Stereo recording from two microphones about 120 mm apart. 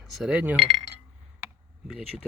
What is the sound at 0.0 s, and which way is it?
Cutlery, 5° right (ahead or behind).